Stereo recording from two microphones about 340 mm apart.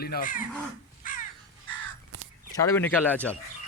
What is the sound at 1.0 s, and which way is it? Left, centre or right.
Crow, left.